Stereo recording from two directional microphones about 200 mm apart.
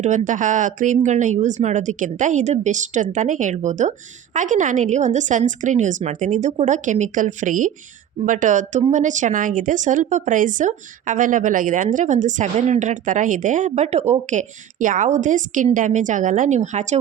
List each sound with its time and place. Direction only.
0.0 s speech: 40° right (ahead or behind)